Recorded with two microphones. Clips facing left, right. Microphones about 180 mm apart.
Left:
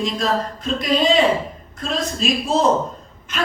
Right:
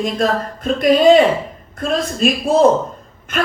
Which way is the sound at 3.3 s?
55° right (ahead or behind).